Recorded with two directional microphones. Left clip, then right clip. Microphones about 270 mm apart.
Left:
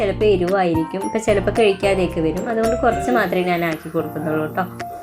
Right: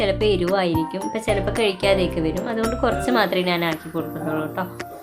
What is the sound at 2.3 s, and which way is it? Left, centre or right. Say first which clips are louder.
A woman's voice: left 4 dB; centre.